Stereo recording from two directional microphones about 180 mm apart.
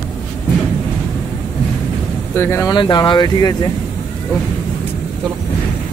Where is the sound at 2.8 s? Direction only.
25° left (ahead or behind).